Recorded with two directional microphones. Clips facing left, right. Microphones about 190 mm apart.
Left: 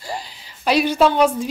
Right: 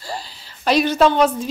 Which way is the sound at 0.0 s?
20° left (ahead or behind).